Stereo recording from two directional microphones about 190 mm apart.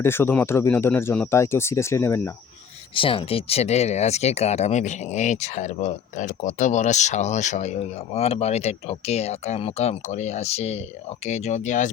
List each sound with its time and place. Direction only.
0.0 s speech: 10° left (ahead or behind)
2.9 s speech: 25° left (ahead or behind)